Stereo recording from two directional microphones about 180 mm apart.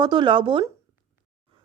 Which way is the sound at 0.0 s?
25° right (ahead or behind).